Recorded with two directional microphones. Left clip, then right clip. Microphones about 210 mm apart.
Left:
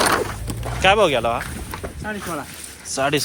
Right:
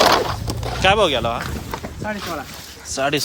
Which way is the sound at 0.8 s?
10° right (ahead or behind).